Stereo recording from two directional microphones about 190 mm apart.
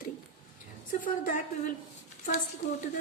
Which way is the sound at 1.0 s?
45° left (ahead or behind).